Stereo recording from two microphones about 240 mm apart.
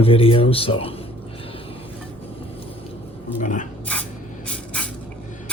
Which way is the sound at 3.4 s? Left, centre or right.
Left.